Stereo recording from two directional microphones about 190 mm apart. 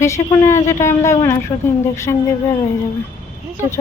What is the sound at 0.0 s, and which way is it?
A woman's voice, 15° left (ahead or behind).